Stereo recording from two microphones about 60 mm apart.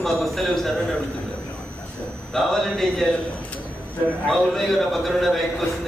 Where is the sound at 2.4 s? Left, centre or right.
Centre.